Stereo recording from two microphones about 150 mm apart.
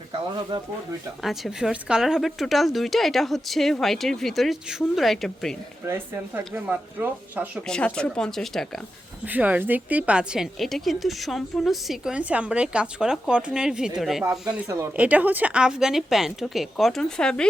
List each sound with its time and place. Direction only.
0.5 s speech: 35° right (ahead or behind)
1.2 s a woman's voice: centre (ahead or behind)
5.9 s speech: 10° right (ahead or behind)
7.7 s a woman's voice: 5° left (ahead or behind)
9.2 s a woman's voice: 10° right (ahead or behind)